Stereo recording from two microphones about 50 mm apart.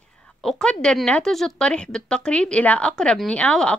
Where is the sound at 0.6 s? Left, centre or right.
Centre.